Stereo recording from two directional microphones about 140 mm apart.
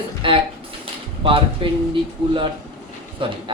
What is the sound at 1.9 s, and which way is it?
Speech, 40° right (ahead or behind).